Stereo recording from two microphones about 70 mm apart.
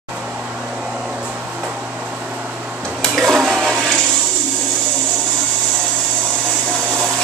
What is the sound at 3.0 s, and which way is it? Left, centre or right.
Toilet flush, centre.